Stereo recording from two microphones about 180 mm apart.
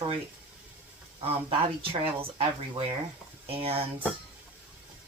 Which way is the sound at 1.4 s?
30° right (ahead or behind).